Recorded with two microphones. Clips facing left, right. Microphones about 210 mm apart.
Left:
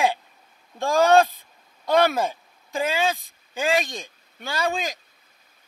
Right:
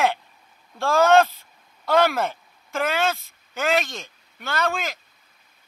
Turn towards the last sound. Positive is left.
turn(degrees=15)  # may be behind; listen again after turning